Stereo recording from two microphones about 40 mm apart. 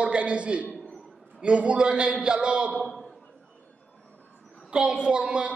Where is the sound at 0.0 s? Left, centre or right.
Right.